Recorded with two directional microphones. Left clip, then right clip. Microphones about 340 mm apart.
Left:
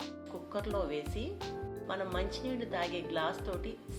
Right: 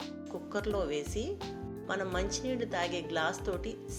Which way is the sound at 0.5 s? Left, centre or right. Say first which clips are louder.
Right 2 dB; centre.